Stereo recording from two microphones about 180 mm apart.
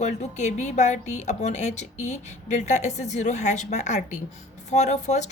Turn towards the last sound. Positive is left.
turn(degrees=40)  # may be behind; listen again after turning